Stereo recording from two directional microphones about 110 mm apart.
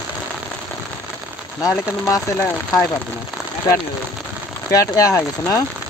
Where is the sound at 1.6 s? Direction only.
30° left (ahead or behind).